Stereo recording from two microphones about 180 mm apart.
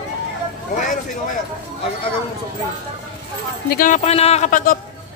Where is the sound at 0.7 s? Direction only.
45° left (ahead or behind).